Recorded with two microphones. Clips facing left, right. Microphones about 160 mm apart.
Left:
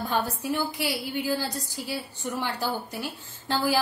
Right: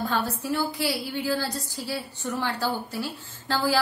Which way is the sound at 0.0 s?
15° left (ahead or behind).